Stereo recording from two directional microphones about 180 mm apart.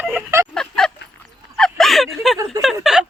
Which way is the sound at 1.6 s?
Centre (ahead or behind).